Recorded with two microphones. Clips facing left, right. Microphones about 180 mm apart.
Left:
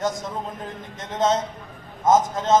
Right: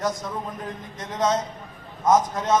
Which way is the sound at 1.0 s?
25° left (ahead or behind).